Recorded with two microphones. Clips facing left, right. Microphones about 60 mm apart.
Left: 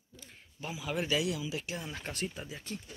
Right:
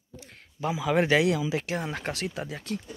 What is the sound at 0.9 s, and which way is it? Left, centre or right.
Speech, right.